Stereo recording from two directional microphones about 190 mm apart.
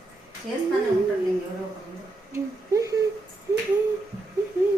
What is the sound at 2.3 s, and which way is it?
Speech, 15° right (ahead or behind).